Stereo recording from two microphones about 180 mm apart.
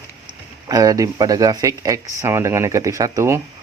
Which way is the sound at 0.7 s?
20° right (ahead or behind).